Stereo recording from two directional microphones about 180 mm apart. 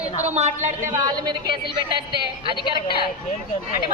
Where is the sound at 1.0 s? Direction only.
20° right (ahead or behind).